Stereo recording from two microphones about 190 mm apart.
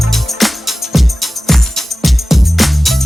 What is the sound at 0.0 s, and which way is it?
Music, centre (ahead or behind).